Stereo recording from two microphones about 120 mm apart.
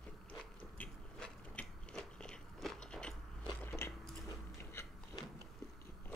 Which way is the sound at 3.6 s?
20° left (ahead or behind).